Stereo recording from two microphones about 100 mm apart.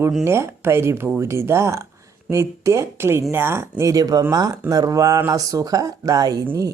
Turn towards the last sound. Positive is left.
turn(degrees=-35)  # may be behind; listen again after turning